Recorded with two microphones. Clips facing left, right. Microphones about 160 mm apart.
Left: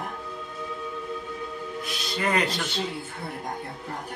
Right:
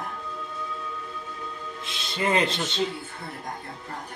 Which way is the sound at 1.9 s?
25° right (ahead or behind).